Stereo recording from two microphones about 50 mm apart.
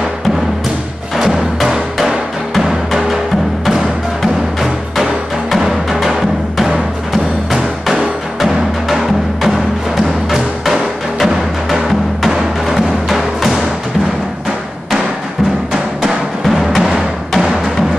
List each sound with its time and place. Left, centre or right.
1.1 s music: centre
7.5 s music: centre
15.7 s music: centre